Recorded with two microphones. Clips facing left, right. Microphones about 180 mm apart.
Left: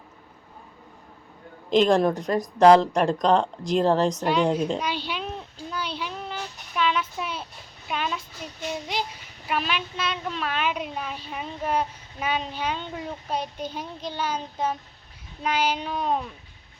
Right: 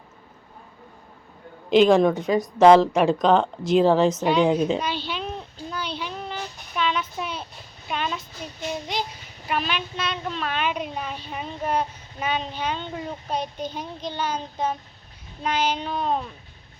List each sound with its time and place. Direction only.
1.7 s a woman's voice: centre (ahead or behind)
4.8 s child singing: 10° left (ahead or behind)
7.9 s a woman's voice: 5° left (ahead or behind)
8.7 s a sound: 5° left (ahead or behind)
9.5 s a woman's voice: centre (ahead or behind)
15.4 s a sound: 10° left (ahead or behind)